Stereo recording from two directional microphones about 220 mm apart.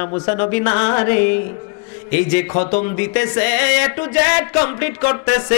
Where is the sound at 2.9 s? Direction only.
15° left (ahead or behind).